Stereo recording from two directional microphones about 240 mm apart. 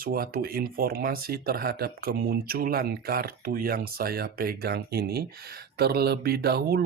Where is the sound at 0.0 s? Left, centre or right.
Right.